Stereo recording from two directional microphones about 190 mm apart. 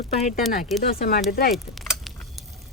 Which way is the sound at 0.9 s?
55° left (ahead or behind).